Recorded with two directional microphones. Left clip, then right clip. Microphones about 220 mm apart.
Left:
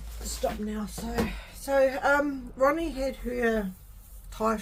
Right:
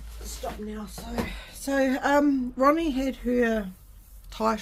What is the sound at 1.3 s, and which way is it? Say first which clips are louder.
Speech: left 2 dB; 45° right (ahead or behind).